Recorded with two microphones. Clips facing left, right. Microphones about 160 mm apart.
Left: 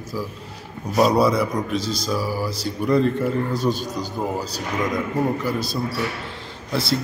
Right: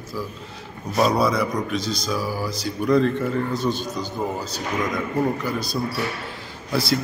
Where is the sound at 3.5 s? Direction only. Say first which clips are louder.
Left 1 dB; 35° left (ahead or behind).